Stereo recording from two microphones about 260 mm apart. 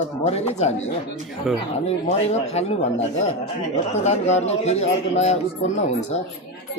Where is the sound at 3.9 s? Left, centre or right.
Left.